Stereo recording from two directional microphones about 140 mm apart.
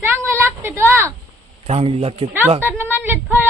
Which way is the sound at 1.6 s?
45° right (ahead or behind).